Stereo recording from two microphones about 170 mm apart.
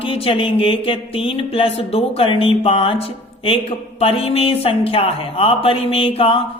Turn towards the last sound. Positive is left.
turn(degrees=35)  # may be behind; listen again after turning